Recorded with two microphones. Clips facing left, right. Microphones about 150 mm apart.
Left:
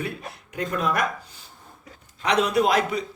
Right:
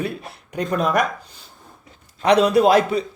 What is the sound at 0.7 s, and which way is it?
Speech, 70° right (ahead or behind).